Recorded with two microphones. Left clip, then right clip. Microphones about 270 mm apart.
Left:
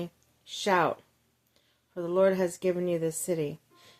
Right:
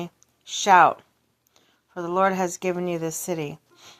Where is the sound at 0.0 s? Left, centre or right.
Centre.